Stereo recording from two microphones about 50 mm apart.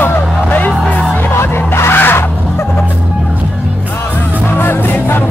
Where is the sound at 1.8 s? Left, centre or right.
Left.